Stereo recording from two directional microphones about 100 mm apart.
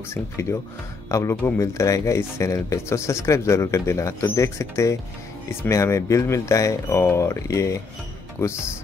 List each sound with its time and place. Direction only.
0.1 s speech: 30° left (ahead or behind)